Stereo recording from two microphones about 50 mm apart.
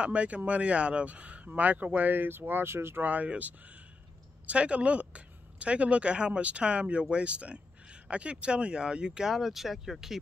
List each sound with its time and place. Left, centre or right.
0.0 s speech: right
3.0 s a woman's voice: right; by 10.1 s centre